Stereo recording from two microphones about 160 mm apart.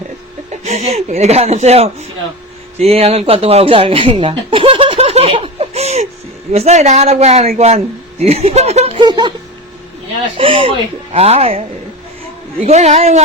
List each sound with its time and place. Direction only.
0.5 s speech: 45° right (ahead or behind); by 9.3 s 25° right (ahead or behind)
10.3 s speech: 35° right (ahead or behind)